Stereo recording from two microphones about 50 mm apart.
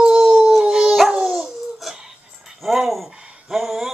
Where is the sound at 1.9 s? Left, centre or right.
Centre.